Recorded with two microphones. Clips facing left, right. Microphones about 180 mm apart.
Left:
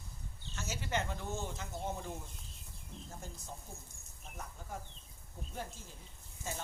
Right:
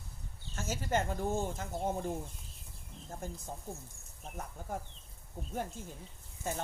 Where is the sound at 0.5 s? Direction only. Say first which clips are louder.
Right 5 dB; 45° right (ahead or behind).